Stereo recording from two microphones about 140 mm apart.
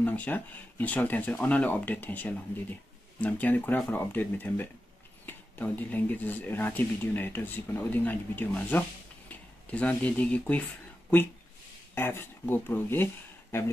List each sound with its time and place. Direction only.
0.0 s speech: 10° left (ahead or behind)
11.9 s speech: 15° left (ahead or behind)